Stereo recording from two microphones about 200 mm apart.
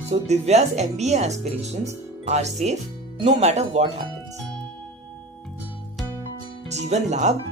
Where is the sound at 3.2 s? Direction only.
35° right (ahead or behind).